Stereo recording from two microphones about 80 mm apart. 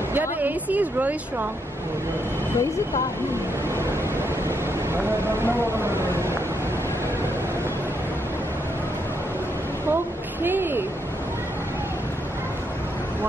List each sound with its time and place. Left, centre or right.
0.1 s a sound: right
4.5 s speech: right
10.4 s speech: right